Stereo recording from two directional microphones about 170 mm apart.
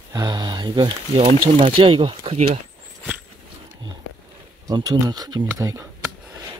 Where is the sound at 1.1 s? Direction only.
45° right (ahead or behind).